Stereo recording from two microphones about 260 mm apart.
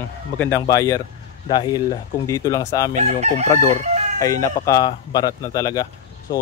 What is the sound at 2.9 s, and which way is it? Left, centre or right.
Chicken, right.